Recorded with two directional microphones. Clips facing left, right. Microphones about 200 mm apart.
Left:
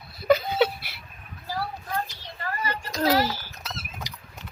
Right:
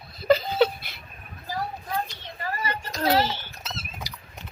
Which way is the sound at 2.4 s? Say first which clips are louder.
Even; 25° right (ahead or behind).